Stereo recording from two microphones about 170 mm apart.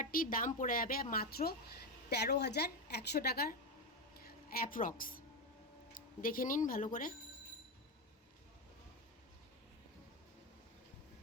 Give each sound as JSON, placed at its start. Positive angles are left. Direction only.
{"t": 0.0, "sound": "a woman's voice", "side_deg": 55}
{"t": 4.3, "sound": "speech", "side_deg": 55}